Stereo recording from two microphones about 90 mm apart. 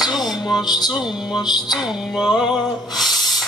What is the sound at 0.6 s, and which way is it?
Music, 50° left (ahead or behind).